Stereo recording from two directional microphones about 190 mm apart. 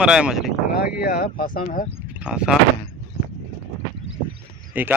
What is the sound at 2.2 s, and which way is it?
Speech, 5° right (ahead or behind).